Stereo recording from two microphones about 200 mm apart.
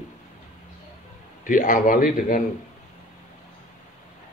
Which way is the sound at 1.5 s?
40° left (ahead or behind).